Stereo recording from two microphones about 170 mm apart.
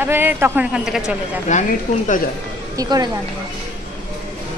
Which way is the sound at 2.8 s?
25° right (ahead or behind).